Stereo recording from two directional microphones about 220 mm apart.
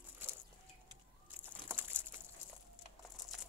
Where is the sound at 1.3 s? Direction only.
10° right (ahead or behind).